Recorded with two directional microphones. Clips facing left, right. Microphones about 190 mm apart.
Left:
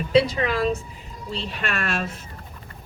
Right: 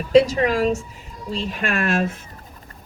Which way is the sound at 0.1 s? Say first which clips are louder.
Right 5 dB; 40° right (ahead or behind).